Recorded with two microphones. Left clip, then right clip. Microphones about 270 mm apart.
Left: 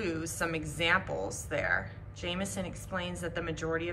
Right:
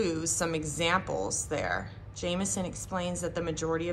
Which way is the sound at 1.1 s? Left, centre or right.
Right.